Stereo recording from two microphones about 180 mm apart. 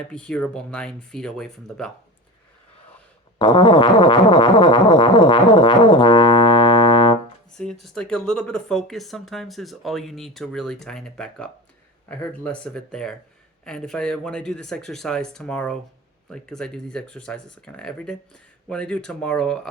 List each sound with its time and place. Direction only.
0.1 s speech: 5° left (ahead or behind)
3.3 s music: 25° left (ahead or behind)
7.6 s speech: 5° left (ahead or behind)